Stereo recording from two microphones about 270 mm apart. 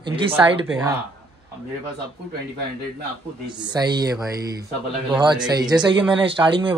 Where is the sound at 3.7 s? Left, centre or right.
Centre.